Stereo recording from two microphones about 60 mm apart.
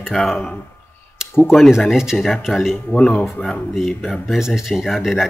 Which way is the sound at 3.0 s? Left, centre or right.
Centre.